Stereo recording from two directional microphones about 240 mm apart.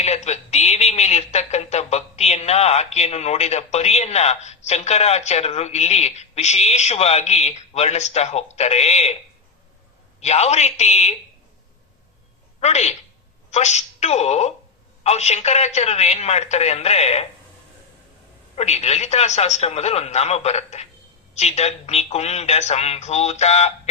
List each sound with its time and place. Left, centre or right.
0.0 s speech: left
10.2 s speech: left
12.5 s a woman's voice: left
18.5 s speech: left